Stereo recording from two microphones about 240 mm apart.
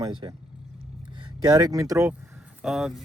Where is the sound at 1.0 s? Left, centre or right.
Centre.